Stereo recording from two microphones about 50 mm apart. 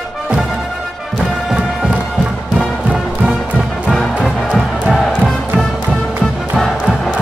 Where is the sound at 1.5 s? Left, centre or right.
Centre.